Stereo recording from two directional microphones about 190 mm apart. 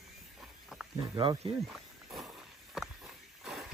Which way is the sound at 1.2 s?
25° right (ahead or behind).